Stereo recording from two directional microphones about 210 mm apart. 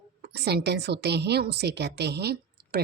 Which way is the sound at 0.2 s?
50° right (ahead or behind).